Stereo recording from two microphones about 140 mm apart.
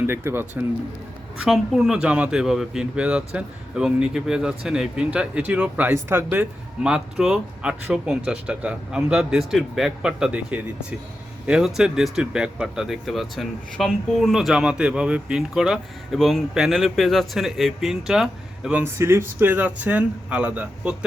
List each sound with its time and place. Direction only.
0.0 s speech: 15° right (ahead or behind)
1.4 s speech: centre (ahead or behind)
18.8 s speech: 20° right (ahead or behind)